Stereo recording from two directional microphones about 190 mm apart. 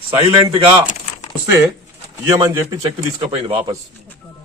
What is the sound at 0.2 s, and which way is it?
A man's voice, 20° right (ahead or behind).